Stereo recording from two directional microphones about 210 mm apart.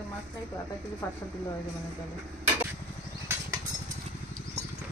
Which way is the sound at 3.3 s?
10° right (ahead or behind).